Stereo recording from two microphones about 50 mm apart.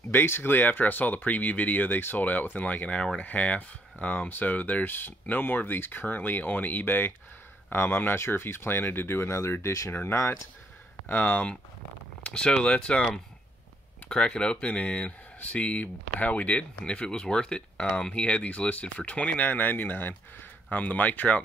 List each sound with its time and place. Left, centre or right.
0.1 s speech: left
9.4 s speech: left
11.1 s speech: left
12.2 s speech: left